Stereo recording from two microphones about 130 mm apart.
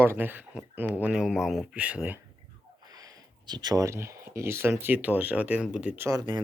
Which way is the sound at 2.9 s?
30° right (ahead or behind).